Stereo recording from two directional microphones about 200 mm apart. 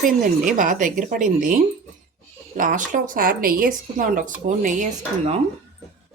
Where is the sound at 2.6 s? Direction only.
40° right (ahead or behind).